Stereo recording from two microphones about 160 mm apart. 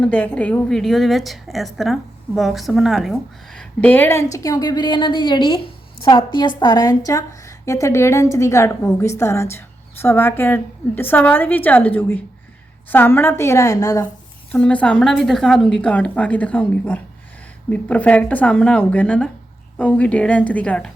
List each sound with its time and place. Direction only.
0.0 s a woman's voice: 10° left (ahead or behind)
14.5 s a woman's voice: 10° left (ahead or behind)